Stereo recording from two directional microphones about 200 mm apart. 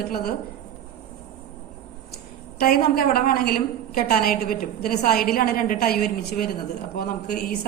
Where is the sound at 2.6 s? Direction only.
45° left (ahead or behind).